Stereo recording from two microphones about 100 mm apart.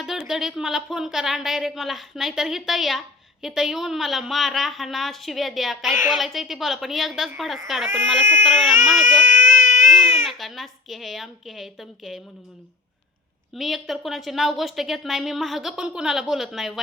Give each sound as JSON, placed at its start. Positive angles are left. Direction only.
{"t": 0.2, "sound": "a woman's voice", "side_deg": -5}
{"t": 9.3, "sound": "baby cry", "side_deg": -30}
{"t": 9.9, "sound": "speech", "side_deg": 0}
{"t": 13.5, "sound": "a woman's voice", "side_deg": 0}